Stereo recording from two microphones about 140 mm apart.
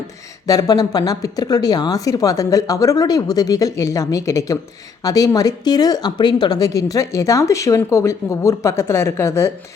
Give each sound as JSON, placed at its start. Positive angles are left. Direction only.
{"t": 0.4, "sound": "speech", "side_deg": 25}